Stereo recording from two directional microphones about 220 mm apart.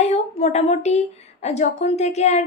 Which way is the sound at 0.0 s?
30° left (ahead or behind).